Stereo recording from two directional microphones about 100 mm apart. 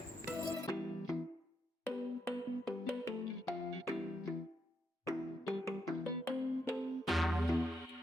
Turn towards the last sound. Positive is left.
turn(degrees=0)  # may be behind; listen again after turning